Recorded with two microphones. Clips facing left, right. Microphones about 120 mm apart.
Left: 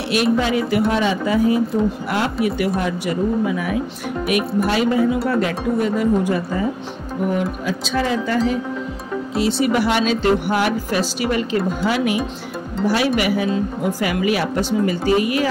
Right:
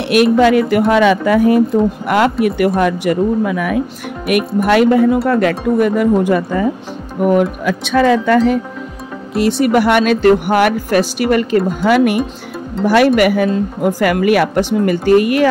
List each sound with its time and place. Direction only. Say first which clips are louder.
0.1 s speech: right 8 dB; 60° right (ahead or behind)